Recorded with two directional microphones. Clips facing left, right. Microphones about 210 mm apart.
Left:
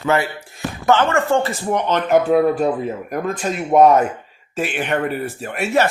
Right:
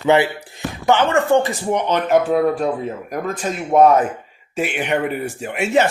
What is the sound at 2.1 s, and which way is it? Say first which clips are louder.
Speech: left 2 dB; centre (ahead or behind).